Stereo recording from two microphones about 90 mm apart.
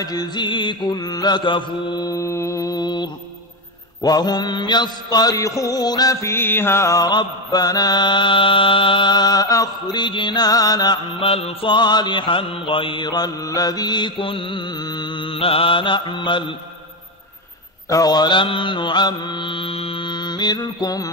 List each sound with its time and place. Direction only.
0.0 s mantra: 45° left (ahead or behind)
2.0 s mantra: 35° left (ahead or behind)
6.2 s music: 25° left (ahead or behind)
7.0 s mantra: 50° left (ahead or behind)
9.9 s mantra: 60° left (ahead or behind)
11.1 s mantra: 90° left; by 16.5 s 65° left (ahead or behind)
17.8 s mantra: 40° left (ahead or behind)